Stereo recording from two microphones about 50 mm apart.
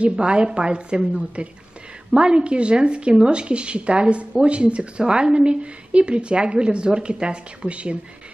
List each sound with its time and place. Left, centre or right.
0.0 s speech: centre